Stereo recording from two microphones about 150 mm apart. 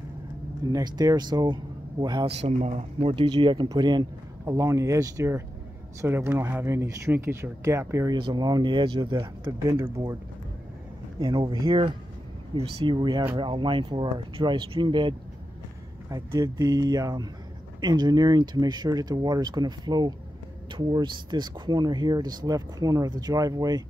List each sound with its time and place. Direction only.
0.7 s speech: 25° right (ahead or behind)
2.3 s speech: 45° right (ahead or behind); by 9.8 s 30° right (ahead or behind)
9.8 s speech: 15° right (ahead or behind)
11.1 s speech: 35° right (ahead or behind)